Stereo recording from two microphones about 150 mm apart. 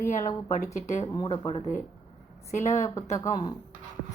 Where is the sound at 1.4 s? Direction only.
45° left (ahead or behind).